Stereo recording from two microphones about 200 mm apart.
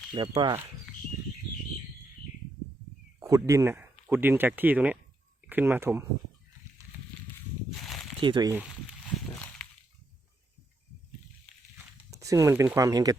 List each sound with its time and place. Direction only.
0.1 s speech: 25° right (ahead or behind)
3.2 s speech: 15° right (ahead or behind)
7.8 s a sound: centre (ahead or behind)
8.2 s speech: 20° right (ahead or behind)
12.1 s speech: 15° right (ahead or behind)